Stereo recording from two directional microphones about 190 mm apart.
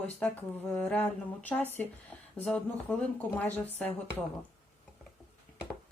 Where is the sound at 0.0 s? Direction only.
5° left (ahead or behind).